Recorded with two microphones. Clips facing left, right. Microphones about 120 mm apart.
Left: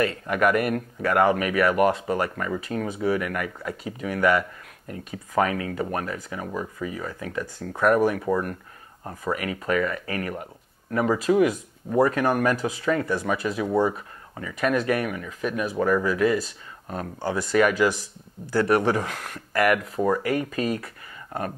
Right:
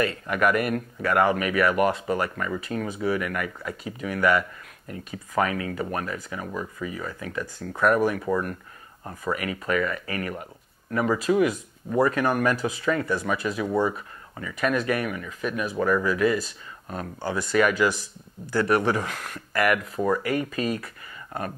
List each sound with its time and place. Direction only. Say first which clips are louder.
0.0 s speech: left 1 dB; 45° left (ahead or behind); by 9.3 s 25° left (ahead or behind)
9.3 s speech: left 1 dB; 45° left (ahead or behind)
20.0 s speech: left 1 dB; 30° left (ahead or behind)
20.2 s speech: left 1 dB; 45° left (ahead or behind)